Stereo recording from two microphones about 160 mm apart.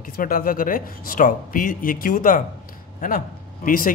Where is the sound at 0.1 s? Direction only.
65° left (ahead or behind).